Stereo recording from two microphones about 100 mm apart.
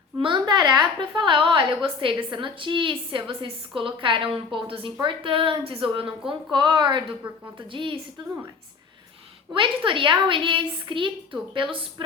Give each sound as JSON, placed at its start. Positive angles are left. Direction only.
{"t": 0.2, "sound": "a woman's voice", "side_deg": -55}
{"t": 9.6, "sound": "a woman's voice", "side_deg": -55}